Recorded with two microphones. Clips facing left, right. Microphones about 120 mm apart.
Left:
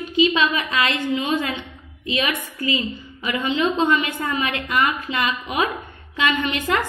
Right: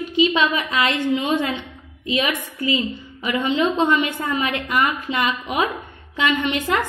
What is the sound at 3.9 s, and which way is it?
A woman's voice, 20° right (ahead or behind).